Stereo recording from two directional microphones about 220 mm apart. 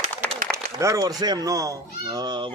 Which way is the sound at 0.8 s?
15° right (ahead or behind).